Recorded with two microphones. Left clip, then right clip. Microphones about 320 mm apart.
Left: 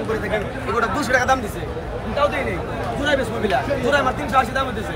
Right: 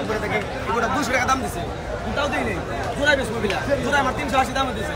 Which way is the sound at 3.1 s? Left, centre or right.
Centre.